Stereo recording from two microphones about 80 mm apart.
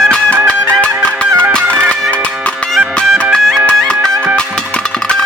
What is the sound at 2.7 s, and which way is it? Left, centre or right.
Music, centre.